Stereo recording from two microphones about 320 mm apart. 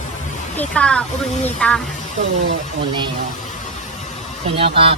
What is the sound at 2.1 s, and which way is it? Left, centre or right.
Speech, right.